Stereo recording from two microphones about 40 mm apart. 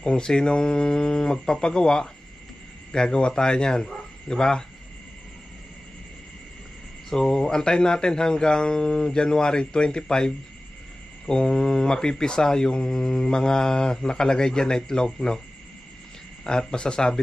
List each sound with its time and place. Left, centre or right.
0.0 s a man's voice: centre
7.1 s speech: centre
16.4 s speech: centre